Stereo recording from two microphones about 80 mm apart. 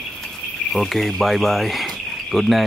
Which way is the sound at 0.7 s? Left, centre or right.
Centre.